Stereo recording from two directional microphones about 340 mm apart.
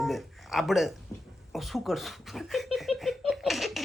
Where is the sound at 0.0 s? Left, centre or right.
Centre.